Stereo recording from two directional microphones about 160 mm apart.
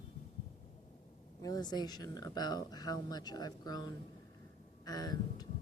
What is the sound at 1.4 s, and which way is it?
Speech, 25° left (ahead or behind).